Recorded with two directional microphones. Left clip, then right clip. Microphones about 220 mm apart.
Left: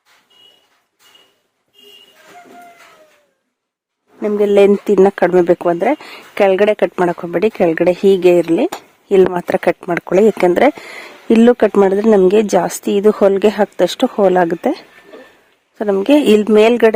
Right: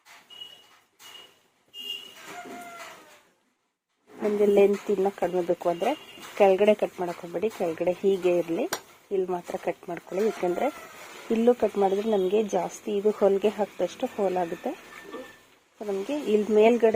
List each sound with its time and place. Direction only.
4.4 s speech: 40° left (ahead or behind)
15.8 s speech: 50° left (ahead or behind)